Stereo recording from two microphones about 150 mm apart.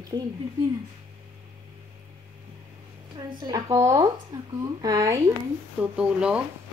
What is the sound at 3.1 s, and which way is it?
Speech, 25° right (ahead or behind).